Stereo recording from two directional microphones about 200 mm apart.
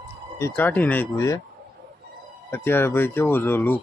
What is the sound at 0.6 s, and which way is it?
Speech, 10° left (ahead or behind).